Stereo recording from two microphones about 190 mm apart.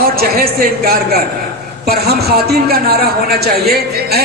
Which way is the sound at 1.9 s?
55° right (ahead or behind).